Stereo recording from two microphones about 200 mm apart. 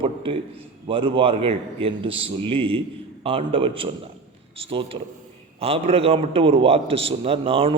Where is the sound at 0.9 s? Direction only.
25° right (ahead or behind).